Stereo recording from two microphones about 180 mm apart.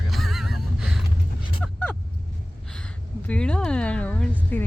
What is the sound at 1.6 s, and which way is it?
Vehicle, 10° left (ahead or behind).